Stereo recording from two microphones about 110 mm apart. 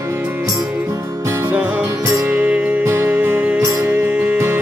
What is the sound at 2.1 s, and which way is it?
Music, 20° right (ahead or behind).